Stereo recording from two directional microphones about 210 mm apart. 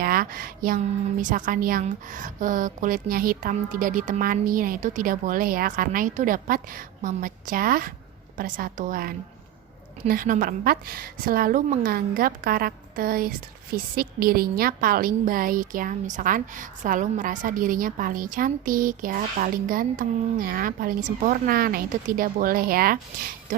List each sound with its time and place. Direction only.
0.0 s a woman's voice: 45° right (ahead or behind)